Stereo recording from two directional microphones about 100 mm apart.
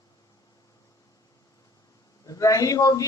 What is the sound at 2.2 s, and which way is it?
Speech, 35° left (ahead or behind).